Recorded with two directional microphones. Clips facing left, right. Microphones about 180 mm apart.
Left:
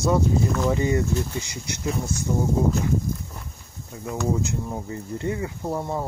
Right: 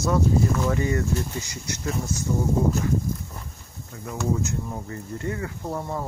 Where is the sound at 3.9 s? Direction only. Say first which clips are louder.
Left 3 dB; 15° left (ahead or behind).